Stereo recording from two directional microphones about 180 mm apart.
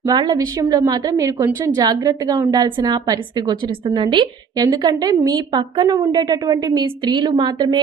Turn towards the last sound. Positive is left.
turn(degrees=-25)  # may be behind; listen again after turning